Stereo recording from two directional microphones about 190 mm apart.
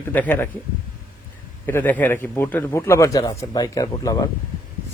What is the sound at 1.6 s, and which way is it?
A man's voice, 10° left (ahead or behind).